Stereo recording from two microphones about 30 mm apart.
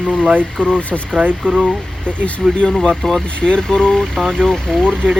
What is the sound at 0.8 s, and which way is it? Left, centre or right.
Speech, left.